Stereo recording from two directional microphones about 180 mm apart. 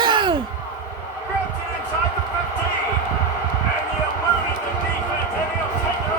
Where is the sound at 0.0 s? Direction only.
25° right (ahead or behind).